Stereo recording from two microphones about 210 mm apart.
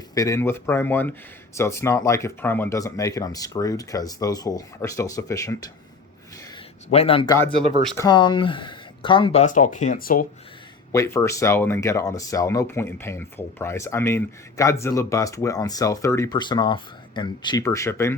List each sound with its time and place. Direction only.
0.1 s speech: 15° left (ahead or behind)
6.9 s speech: 25° left (ahead or behind)
10.9 s speech: 15° left (ahead or behind)